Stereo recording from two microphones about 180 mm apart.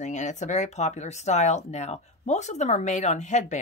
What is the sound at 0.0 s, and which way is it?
Speech, 40° left (ahead or behind).